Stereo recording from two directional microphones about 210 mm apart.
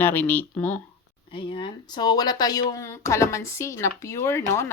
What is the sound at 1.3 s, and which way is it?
A woman's voice, 25° left (ahead or behind).